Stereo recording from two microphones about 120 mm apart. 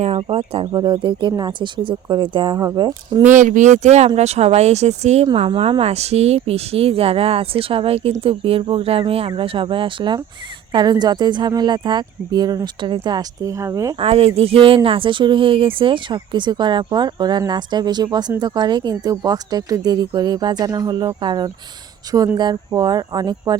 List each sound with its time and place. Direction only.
0.0 s speech: 50° right (ahead or behind)
0.7 s speech: 40° right (ahead or behind)
2.6 s speech: 30° right (ahead or behind)
3.3 s speech: 90° right; by 5.2 s 65° right (ahead or behind)
5.2 s speech: 45° right (ahead or behind); by 13.9 s 25° right (ahead or behind)
14.0 s speech: 55° right (ahead or behind); by 23.6 s 35° right (ahead or behind)